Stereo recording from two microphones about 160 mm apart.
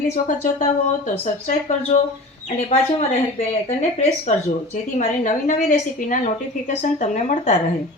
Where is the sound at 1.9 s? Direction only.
50° left (ahead or behind).